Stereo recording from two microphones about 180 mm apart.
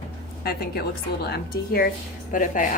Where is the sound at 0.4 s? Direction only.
60° left (ahead or behind).